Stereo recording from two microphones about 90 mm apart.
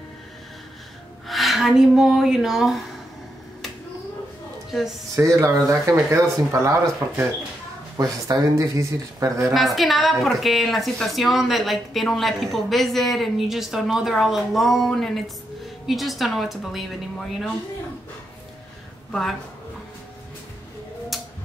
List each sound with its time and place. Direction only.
1.2 s a woman's voice: centre (ahead or behind)
5.1 s speech: 35° right (ahead or behind)
9.5 s a woman's voice: centre (ahead or behind)
21.1 s bird: centre (ahead or behind)